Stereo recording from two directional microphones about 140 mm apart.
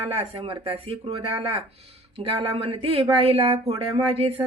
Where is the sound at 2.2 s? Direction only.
40° right (ahead or behind).